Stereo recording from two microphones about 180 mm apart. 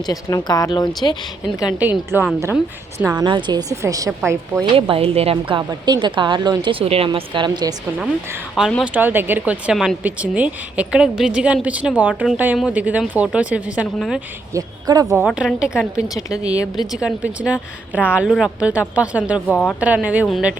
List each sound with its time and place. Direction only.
0.0 s speech: 20° left (ahead or behind)
1.8 s a woman's voice: 10° right (ahead or behind)
3.1 s a woman's voice: 25° right (ahead or behind)
4.7 s a woman's voice: 30° right (ahead or behind)
7.9 s a woman's voice: 5° right (ahead or behind)
14.5 s a woman's voice: 20° right (ahead or behind)
15.2 s a woman's voice: centre (ahead or behind)
19.5 s a woman's voice: 5° left (ahead or behind)
19.8 s a woman's voice: 10° right (ahead or behind)